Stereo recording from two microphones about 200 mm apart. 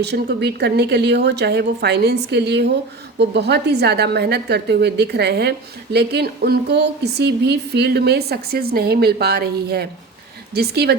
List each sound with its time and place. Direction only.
0.0 s a woman's voice: 55° right (ahead or behind)